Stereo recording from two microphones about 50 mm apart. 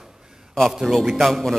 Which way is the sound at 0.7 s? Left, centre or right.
Centre.